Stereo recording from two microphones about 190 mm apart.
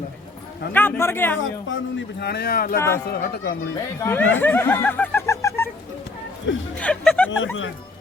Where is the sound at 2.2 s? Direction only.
55° left (ahead or behind).